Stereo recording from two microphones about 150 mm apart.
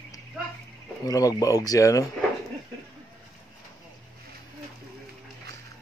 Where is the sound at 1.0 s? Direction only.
25° left (ahead or behind).